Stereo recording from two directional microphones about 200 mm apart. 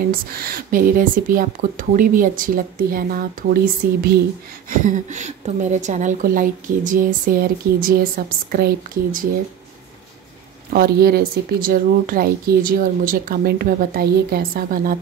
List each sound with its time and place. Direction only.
0.1 s a woman's voice: 50° right (ahead or behind)
10.7 s a woman's voice: 50° right (ahead or behind)